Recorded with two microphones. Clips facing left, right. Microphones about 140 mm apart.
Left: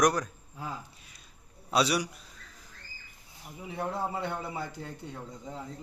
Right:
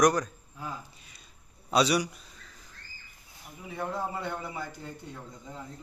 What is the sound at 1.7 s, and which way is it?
Speech, 5° left (ahead or behind).